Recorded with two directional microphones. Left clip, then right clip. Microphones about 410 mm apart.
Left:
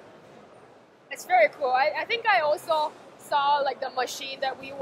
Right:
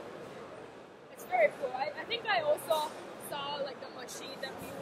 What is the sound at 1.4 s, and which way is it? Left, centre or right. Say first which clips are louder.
Speech: left 7 dB; left.